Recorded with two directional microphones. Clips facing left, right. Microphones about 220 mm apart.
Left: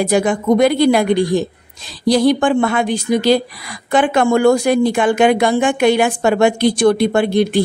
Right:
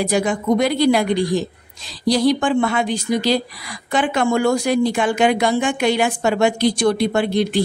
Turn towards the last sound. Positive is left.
turn(degrees=55)  # may be behind; listen again after turning